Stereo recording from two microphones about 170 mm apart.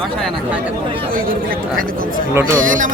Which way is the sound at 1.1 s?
60° right (ahead or behind).